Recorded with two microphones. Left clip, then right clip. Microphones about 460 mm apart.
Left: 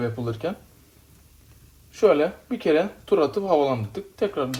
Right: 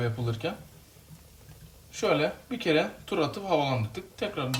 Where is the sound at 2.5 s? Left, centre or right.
Centre.